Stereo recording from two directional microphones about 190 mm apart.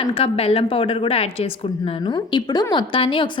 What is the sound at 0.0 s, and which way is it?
A woman's voice, 30° left (ahead or behind).